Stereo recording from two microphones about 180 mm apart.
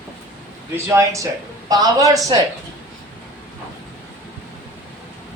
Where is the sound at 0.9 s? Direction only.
15° right (ahead or behind).